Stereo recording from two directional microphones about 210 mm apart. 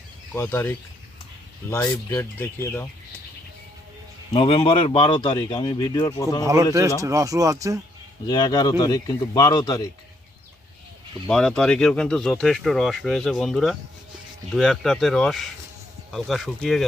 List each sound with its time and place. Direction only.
0.3 s speech: 10° left (ahead or behind)
4.4 s speech: 25° left (ahead or behind)
6.4 s speech: 15° right (ahead or behind)
8.3 s speech: 20° left (ahead or behind)
11.3 s speech: 5° left (ahead or behind)